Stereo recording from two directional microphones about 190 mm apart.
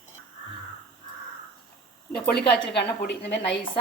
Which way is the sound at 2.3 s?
60° left (ahead or behind).